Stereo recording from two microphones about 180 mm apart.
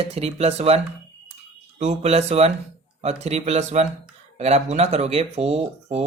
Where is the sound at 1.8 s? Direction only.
40° right (ahead or behind).